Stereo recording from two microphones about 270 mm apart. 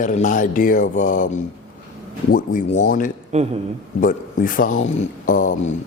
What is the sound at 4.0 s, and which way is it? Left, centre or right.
Speech, left.